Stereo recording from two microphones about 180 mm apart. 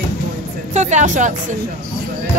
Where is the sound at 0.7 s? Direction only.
40° right (ahead or behind).